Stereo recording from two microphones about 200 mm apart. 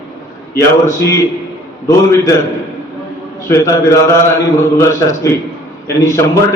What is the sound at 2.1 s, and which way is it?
Speech, 15° left (ahead or behind).